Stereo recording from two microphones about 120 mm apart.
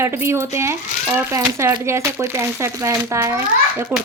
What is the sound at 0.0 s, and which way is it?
Speech, 20° right (ahead or behind).